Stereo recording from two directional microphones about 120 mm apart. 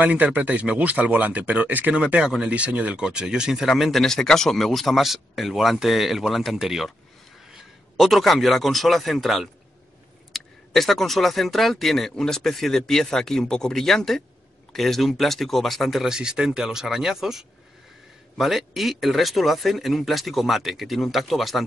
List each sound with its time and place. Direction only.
0.0 s a man's voice: 10° right (ahead or behind)